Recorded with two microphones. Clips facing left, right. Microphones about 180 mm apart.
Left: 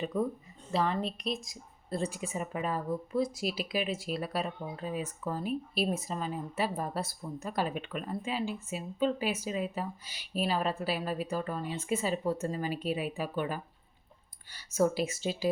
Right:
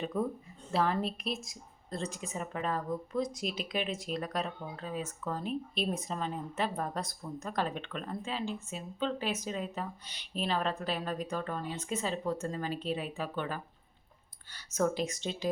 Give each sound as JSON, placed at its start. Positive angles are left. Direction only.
{"t": 0.0, "sound": "speech", "side_deg": 0}
{"t": 1.9, "sound": "speech", "side_deg": 10}